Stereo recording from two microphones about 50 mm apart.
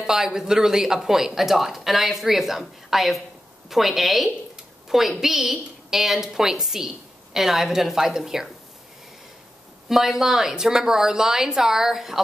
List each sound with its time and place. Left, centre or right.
0.0 s a woman's voice: centre
9.8 s speech: centre